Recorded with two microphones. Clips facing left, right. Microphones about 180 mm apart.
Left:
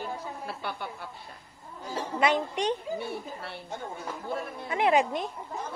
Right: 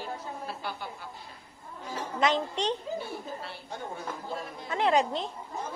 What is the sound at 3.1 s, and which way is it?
Speech, 65° left (ahead or behind).